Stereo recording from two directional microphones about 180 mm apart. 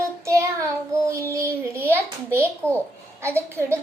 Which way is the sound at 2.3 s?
15° right (ahead or behind).